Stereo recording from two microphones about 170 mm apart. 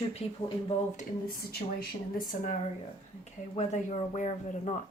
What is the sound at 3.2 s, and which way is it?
A woman's voice, 40° left (ahead or behind).